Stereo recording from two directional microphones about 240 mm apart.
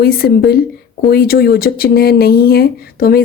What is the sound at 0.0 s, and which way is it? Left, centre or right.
Speech, left.